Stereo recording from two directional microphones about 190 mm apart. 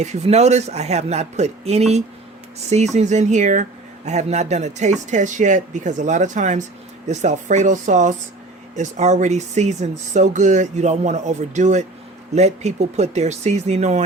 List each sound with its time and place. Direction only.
0.0 s speech: 35° right (ahead or behind)